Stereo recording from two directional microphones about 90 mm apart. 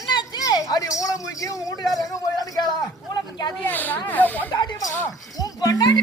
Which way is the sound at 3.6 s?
20° left (ahead or behind).